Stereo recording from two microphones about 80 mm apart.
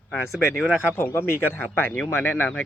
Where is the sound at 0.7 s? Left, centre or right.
Left.